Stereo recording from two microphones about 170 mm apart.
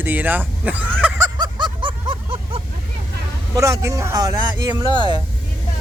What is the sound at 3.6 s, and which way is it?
Speech, 20° right (ahead or behind).